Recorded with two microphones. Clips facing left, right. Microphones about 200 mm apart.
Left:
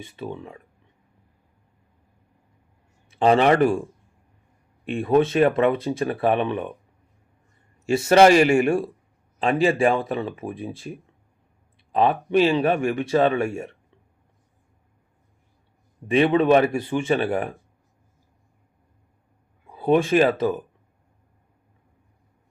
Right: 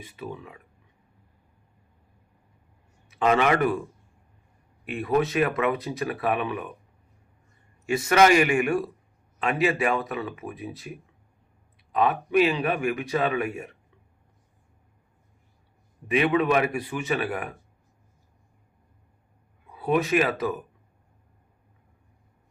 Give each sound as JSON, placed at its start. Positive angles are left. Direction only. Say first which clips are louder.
{"t": 0.0, "sound": "speech", "louder": "left 4 dB", "side_deg": 30}
{"t": 3.1, "sound": "speech", "louder": "left 5 dB", "side_deg": 30}
{"t": 4.9, "sound": "speech", "louder": "left 5 dB", "side_deg": 25}
{"t": 7.9, "sound": "speech", "louder": "left 5 dB", "side_deg": 25}
{"t": 16.0, "sound": "speech", "louder": "left 5 dB", "side_deg": 30}
{"t": 19.7, "sound": "speech", "louder": "left 5 dB", "side_deg": 30}